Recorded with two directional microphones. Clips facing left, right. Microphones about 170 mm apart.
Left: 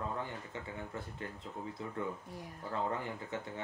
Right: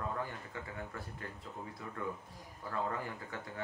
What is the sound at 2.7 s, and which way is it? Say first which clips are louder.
Speech: left 1 dB; 25° left (ahead or behind).